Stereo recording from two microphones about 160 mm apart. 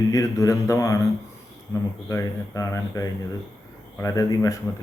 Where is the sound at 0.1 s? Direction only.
20° left (ahead or behind).